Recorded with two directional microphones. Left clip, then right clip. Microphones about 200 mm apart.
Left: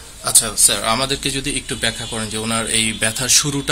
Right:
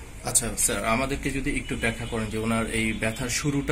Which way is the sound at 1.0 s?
90° left.